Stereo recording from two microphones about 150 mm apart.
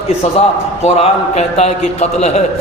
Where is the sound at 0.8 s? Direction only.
45° left (ahead or behind).